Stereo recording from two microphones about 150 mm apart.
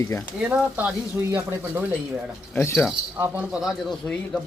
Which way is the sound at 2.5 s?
15° left (ahead or behind).